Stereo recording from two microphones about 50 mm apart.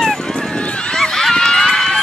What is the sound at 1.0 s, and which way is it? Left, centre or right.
Run, centre.